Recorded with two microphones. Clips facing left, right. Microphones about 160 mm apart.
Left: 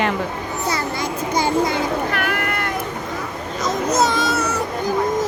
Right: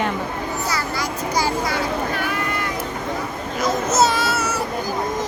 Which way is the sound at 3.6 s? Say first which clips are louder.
Even; 15° left (ahead or behind).